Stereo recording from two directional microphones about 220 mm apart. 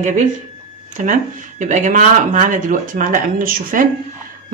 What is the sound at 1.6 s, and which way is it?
Speech, 35° right (ahead or behind).